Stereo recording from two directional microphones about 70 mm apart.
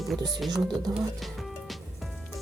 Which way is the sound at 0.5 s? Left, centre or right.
Right.